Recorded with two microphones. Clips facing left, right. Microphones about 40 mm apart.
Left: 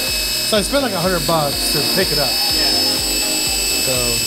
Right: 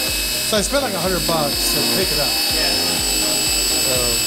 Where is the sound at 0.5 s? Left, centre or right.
Centre.